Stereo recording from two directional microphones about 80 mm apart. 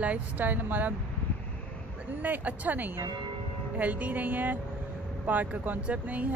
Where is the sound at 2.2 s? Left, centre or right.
Right.